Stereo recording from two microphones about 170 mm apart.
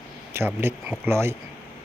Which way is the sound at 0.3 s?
15° right (ahead or behind).